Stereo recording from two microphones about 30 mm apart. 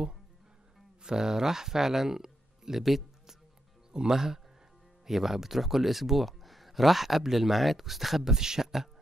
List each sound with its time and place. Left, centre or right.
1.0 s speech: right
3.9 s speech: right
5.0 s speech: centre